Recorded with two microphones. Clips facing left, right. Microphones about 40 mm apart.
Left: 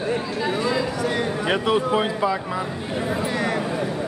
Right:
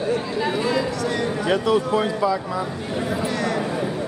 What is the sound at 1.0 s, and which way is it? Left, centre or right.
Speech, left.